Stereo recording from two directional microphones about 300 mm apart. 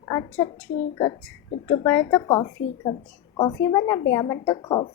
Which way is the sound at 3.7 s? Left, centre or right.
Centre.